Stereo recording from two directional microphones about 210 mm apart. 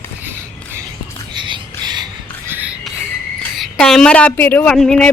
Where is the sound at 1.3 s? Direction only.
20° right (ahead or behind).